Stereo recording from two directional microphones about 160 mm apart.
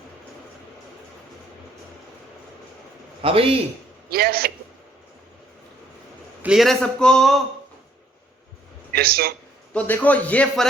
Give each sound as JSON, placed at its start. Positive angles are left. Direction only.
{"t": 3.2, "sound": "a man's voice", "side_deg": -35}
{"t": 4.1, "sound": "a man's voice", "side_deg": -75}
{"t": 6.4, "sound": "a man's voice", "side_deg": -5}
{"t": 8.9, "sound": "a man's voice", "side_deg": -75}
{"t": 9.7, "sound": "speech", "side_deg": 10}